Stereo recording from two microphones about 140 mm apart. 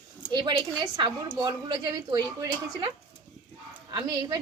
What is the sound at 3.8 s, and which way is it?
Speech, 30° right (ahead or behind).